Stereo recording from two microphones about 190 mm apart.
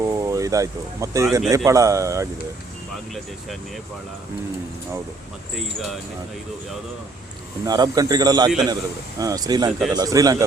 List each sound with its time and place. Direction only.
0.0 s speech: 15° right (ahead or behind)
7.6 s speech: 20° right (ahead or behind)